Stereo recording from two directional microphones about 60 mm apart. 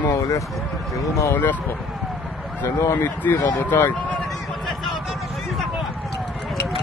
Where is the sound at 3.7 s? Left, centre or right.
Left.